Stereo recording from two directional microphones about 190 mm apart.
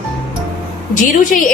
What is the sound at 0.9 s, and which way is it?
Speech, 45° left (ahead or behind).